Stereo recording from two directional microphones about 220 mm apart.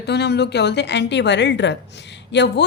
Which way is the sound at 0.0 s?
50° left (ahead or behind).